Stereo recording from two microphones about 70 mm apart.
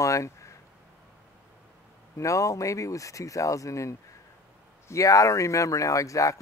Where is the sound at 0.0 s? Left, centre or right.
Left.